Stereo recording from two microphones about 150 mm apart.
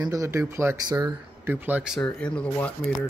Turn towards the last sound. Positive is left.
turn(degrees=10)  # may be behind; listen again after turning